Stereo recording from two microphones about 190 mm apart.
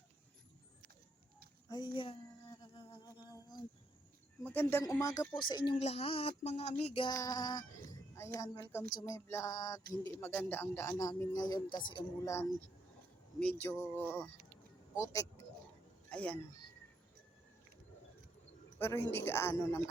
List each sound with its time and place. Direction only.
1.7 s speech: 25° left (ahead or behind)
2.7 s a sound: 20° left (ahead or behind)
4.4 s a man's voice: 10° left (ahead or behind)
14.9 s a sound: 15° left (ahead or behind)
16.0 s speech: 5° left (ahead or behind)
18.8 s a woman's voice: 15° left (ahead or behind)